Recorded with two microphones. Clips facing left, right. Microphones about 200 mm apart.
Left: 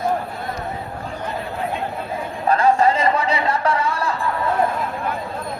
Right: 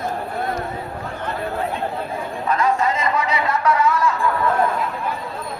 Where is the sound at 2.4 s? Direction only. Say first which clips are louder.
Left 4 dB; 30° left (ahead or behind).